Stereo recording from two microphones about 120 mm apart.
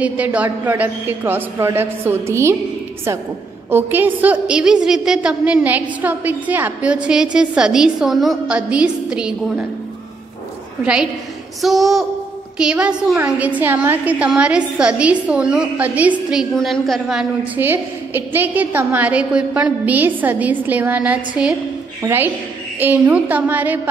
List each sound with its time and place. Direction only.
0.0 s a woman's voice: 10° right (ahead or behind)
3.7 s a woman's voice: 15° right (ahead or behind)
10.8 s a woman's voice: 5° right (ahead or behind)
16.5 s a woman's voice: 5° left (ahead or behind)
17.6 s a woman's voice: 15° right (ahead or behind)